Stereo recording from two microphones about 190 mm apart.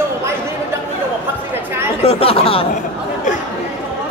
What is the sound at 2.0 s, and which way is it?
Speech, 30° left (ahead or behind).